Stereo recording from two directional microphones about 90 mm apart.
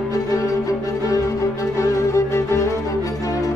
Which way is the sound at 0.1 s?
40° left (ahead or behind).